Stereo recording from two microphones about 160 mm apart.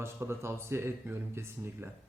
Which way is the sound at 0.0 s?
15° right (ahead or behind).